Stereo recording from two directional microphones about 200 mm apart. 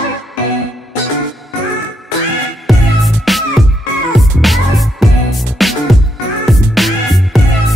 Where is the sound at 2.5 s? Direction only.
Centre (ahead or behind).